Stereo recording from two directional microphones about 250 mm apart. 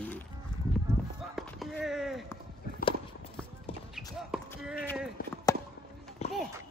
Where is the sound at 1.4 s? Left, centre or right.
Centre.